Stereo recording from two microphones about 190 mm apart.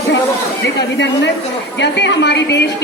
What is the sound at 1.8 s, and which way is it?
Speech, 65° left (ahead or behind).